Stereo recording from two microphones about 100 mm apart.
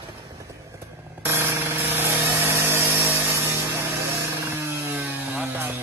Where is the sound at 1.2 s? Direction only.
20° right (ahead or behind).